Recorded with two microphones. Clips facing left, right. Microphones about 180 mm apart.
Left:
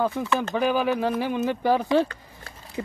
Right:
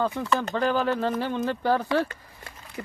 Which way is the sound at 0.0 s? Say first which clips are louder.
Left 1 dB; 5° left (ahead or behind).